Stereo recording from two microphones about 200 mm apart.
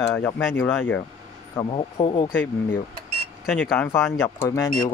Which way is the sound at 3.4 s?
5° left (ahead or behind).